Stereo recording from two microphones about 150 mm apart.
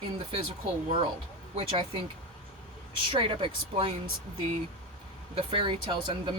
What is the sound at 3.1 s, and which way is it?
Speech, 35° right (ahead or behind).